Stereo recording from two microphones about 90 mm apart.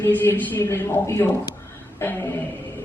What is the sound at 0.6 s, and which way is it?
A woman's voice, 30° left (ahead or behind).